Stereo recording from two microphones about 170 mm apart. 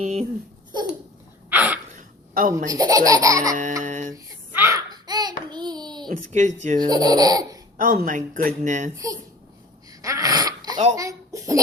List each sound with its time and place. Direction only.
0.0 s speech: 40° right (ahead or behind)
1.5 s gasp: 10° right (ahead or behind)
2.0 s a sound: 55° right (ahead or behind)
2.6 s laughter: 20° right (ahead or behind)
3.5 s speech: 50° right (ahead or behind)
4.1 s babbling: 15° right (ahead or behind)
6.1 s speech: 45° right (ahead or behind)
6.8 s laughter: 25° right (ahead or behind)
7.8 s speech: 55° right (ahead or behind)
10.0 s a sound: 20° right (ahead or behind)
10.9 s laughter: 20° right (ahead or behind)